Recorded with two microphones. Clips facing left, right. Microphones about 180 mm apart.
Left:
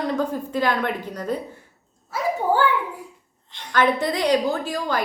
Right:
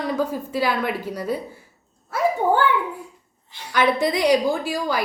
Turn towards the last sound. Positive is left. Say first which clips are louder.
# right 1 dB
turn(degrees=-10)  # may be behind; listen again after turning